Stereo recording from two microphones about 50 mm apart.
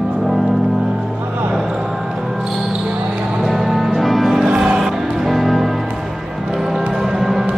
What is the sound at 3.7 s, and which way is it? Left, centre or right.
Music, centre.